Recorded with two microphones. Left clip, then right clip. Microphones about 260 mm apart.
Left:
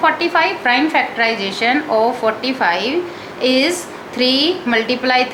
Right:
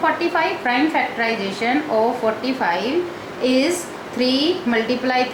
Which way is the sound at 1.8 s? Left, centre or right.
Left.